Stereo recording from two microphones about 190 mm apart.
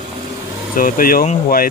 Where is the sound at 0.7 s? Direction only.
50° left (ahead or behind).